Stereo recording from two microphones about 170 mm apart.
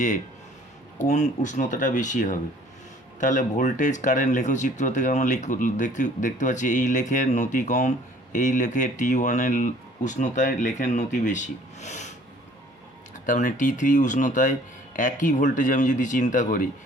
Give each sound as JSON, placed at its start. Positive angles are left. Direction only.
{"t": 0.9, "sound": "speech", "side_deg": 45}
{"t": 13.2, "sound": "speech", "side_deg": 50}